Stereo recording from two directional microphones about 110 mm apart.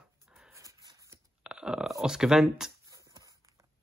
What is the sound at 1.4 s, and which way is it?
Burping, 10° right (ahead or behind).